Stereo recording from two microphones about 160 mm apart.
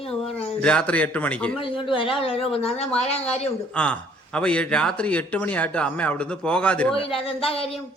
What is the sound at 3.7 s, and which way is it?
A man's voice, 5° left (ahead or behind).